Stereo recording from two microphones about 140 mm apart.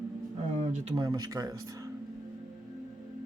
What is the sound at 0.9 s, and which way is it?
Speech, 30° right (ahead or behind).